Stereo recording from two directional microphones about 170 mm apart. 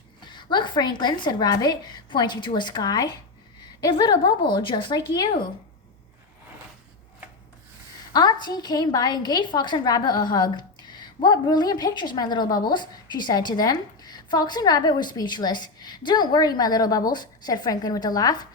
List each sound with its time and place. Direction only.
0.3 s a woman's voice: 25° left (ahead or behind)
8.1 s a woman's voice: 25° left (ahead or behind)